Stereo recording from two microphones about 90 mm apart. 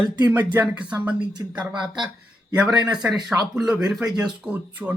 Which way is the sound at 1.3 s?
50° right (ahead or behind).